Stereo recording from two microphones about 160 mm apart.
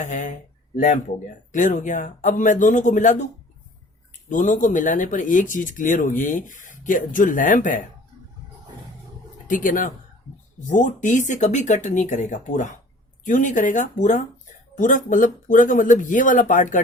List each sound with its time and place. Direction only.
0.0 s speech: 50° left (ahead or behind)
1.5 s speech: 50° left (ahead or behind)
4.3 s speech: 55° left (ahead or behind)
9.5 s speech: 55° left (ahead or behind)